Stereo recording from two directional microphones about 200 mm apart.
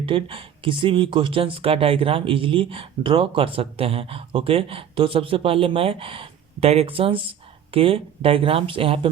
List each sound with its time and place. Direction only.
0.0 s speech: 25° right (ahead or behind)